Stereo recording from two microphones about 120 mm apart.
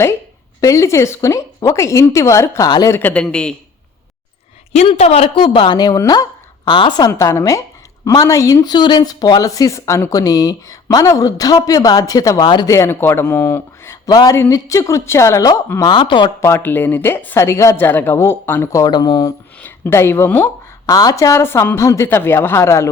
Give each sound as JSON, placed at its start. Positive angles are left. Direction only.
{"t": 0.6, "sound": "speech", "side_deg": 25}
{"t": 2.6, "sound": "speech", "side_deg": 35}
{"t": 2.9, "sound": "a man's voice", "side_deg": 15}
{"t": 4.9, "sound": "a woman's voice", "side_deg": 60}
{"t": 7.1, "sound": "speech", "side_deg": 25}
{"t": 12.7, "sound": "speech", "side_deg": 20}
{"t": 14.1, "sound": "speech", "side_deg": 35}
{"t": 15.8, "sound": "speech", "side_deg": 40}
{"t": 16.4, "sound": "speech", "side_deg": 20}
{"t": 19.6, "sound": "speech", "side_deg": 20}
{"t": 20.8, "sound": "speech", "side_deg": 30}